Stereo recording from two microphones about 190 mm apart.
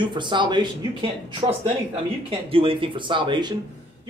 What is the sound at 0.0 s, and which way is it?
Speech, 25° right (ahead or behind).